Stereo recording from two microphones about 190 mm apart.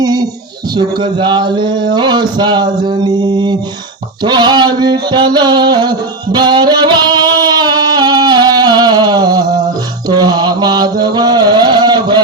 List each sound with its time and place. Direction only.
0.0 s a sound: 20° right (ahead or behind)
6.3 s music: 20° right (ahead or behind)
10.1 s mantra: 20° right (ahead or behind)